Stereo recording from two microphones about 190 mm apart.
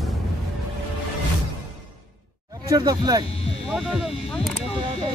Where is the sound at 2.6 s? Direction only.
20° right (ahead or behind).